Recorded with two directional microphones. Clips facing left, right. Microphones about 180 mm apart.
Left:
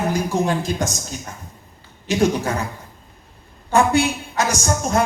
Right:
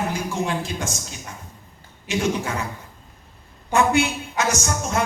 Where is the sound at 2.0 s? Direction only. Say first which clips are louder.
Left 5 dB; 40° left (ahead or behind).